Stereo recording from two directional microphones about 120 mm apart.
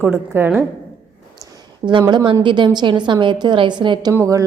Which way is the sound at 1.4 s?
40° right (ahead or behind).